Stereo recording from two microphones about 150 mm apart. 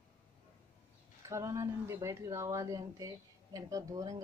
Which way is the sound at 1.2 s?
20° right (ahead or behind).